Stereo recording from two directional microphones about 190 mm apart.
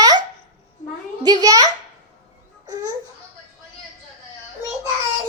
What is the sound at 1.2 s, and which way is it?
Speech, 20° right (ahead or behind).